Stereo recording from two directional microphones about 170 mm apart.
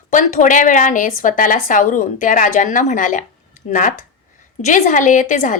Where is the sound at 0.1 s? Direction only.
50° left (ahead or behind).